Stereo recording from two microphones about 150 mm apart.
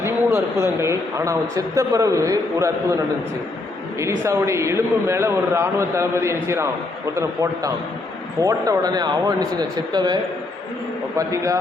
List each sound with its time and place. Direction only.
0.0 s speech: 15° right (ahead or behind)
4.0 s a man's voice: 20° right (ahead or behind)
8.4 s speech: 20° right (ahead or behind)
11.2 s speech: 20° right (ahead or behind)